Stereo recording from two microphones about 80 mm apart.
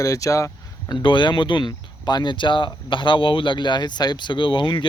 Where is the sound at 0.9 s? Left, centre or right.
Left.